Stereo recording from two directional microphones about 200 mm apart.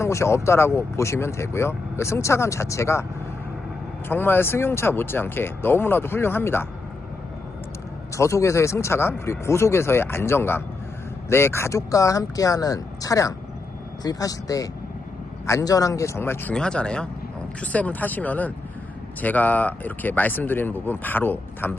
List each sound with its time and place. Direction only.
0.0 s speech: 15° left (ahead or behind)
4.1 s speech: 10° left (ahead or behind)
8.1 s speech: 15° left (ahead or behind)